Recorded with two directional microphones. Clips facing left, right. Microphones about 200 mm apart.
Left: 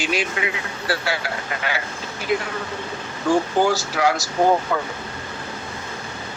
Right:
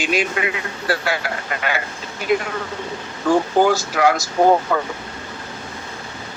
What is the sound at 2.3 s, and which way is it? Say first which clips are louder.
Speech: right 3 dB; 50° right (ahead or behind).